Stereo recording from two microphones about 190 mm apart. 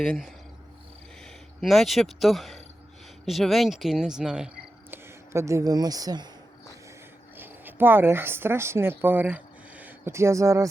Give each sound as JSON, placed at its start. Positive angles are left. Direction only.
{"t": 0.0, "sound": "speech", "side_deg": 0}
{"t": 1.6, "sound": "speech", "side_deg": 0}
{"t": 7.3, "sound": "speech", "side_deg": -10}